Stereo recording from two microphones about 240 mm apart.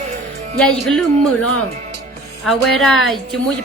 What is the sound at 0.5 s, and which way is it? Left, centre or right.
Speech, centre.